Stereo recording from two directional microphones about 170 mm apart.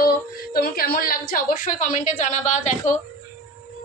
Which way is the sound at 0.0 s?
60° left (ahead or behind).